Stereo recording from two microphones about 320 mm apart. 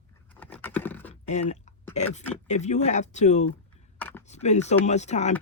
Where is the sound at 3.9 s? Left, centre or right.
Centre.